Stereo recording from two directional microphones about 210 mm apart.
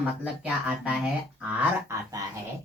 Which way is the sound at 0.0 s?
5° right (ahead or behind).